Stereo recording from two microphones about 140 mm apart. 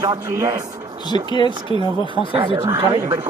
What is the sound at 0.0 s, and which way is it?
Speech, 25° right (ahead or behind).